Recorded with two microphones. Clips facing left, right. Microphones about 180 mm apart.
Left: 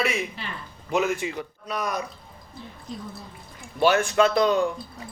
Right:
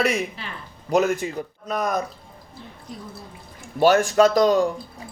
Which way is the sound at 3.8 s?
40° right (ahead or behind).